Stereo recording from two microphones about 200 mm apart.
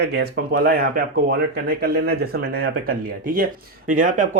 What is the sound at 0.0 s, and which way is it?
Speech, 55° right (ahead or behind).